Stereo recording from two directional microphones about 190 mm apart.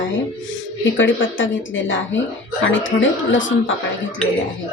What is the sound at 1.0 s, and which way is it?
A woman's voice, 85° left.